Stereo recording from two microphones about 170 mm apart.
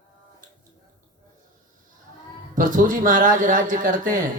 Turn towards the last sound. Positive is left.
turn(degrees=-55)  # may be behind; listen again after turning